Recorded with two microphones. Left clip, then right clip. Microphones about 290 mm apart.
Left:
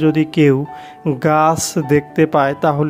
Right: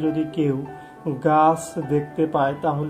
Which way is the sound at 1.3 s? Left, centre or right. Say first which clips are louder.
Left 2 dB; left.